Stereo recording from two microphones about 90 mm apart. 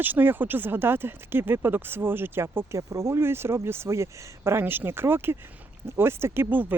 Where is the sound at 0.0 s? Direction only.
20° right (ahead or behind).